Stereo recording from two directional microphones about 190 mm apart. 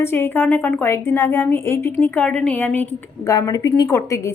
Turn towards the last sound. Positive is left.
turn(degrees=15)  # may be behind; listen again after turning